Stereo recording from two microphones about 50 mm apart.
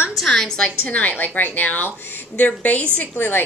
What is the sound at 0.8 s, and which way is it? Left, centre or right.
A woman's voice, left.